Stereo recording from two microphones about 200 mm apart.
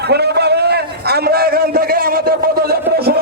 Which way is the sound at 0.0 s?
55° right (ahead or behind).